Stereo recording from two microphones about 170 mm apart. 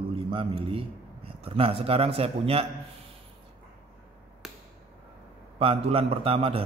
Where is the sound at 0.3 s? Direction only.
30° right (ahead or behind).